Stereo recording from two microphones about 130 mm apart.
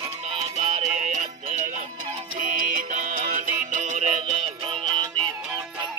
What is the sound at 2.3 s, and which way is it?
Music, 90° right.